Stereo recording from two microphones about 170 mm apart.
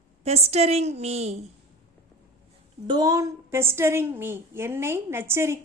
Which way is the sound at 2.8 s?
25° right (ahead or behind).